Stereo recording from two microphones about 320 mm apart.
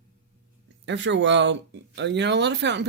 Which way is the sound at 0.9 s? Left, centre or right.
Right.